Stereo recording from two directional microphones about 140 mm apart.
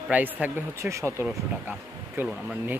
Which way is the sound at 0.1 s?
10° right (ahead or behind).